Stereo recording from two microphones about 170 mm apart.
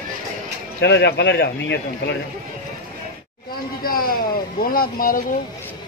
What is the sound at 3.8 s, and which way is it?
Speech, 60° left (ahead or behind).